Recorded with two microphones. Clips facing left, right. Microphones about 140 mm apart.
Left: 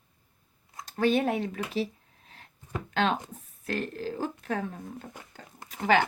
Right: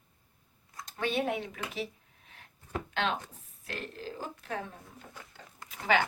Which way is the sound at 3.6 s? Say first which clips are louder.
Left 8 dB; 40° left (ahead or behind).